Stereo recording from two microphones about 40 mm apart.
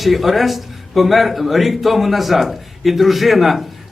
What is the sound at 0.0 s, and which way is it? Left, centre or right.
A man's voice, centre.